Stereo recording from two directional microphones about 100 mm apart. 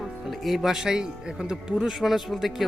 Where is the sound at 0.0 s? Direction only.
Centre (ahead or behind).